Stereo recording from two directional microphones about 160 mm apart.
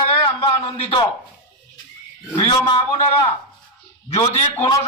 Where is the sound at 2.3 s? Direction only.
30° left (ahead or behind).